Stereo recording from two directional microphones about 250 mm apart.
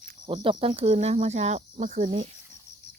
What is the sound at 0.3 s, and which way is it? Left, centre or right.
Speech, right.